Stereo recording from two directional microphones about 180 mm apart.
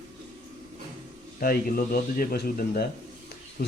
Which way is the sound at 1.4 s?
55° left (ahead or behind).